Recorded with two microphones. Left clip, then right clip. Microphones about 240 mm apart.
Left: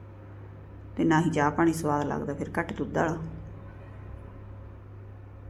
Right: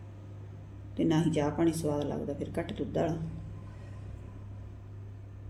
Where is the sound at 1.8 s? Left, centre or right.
Left.